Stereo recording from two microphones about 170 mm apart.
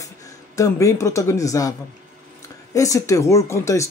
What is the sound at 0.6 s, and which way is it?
A man's voice, 20° left (ahead or behind).